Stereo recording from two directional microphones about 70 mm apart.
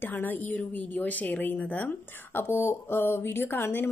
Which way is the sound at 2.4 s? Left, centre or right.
Left.